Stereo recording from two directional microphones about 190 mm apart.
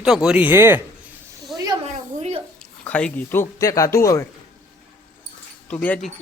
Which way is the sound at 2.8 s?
5° left (ahead or behind).